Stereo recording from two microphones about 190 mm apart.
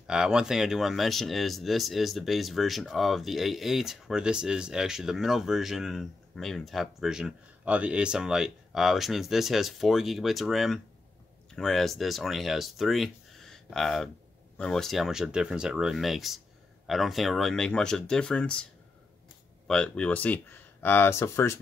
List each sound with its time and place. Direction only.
0.0 s speech: 5° right (ahead or behind)
19.7 s speech: 5° left (ahead or behind)